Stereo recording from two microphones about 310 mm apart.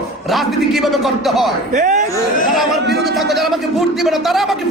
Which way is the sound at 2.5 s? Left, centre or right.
Centre.